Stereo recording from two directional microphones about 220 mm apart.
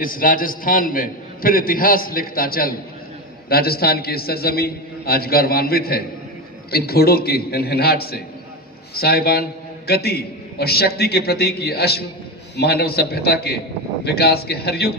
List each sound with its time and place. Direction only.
0.0 s a man's voice: 40° left (ahead or behind)